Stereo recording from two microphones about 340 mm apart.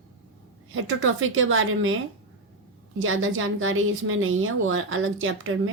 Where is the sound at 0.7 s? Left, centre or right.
Right.